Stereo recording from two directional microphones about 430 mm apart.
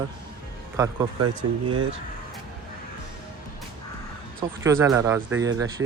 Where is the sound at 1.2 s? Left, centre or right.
Right.